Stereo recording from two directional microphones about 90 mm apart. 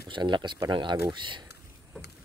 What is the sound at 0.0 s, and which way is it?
Speech, 60° right (ahead or behind).